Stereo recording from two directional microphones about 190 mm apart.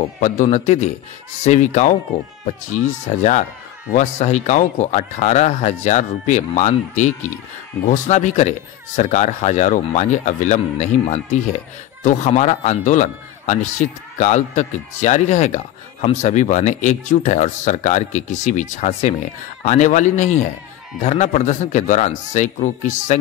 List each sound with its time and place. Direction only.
0.2 s a man's voice: 40° left (ahead or behind)